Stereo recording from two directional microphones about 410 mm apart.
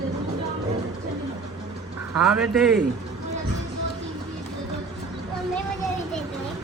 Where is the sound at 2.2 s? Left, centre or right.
Centre.